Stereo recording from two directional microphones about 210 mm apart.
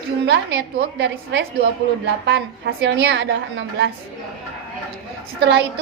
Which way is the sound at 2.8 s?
55° right (ahead or behind).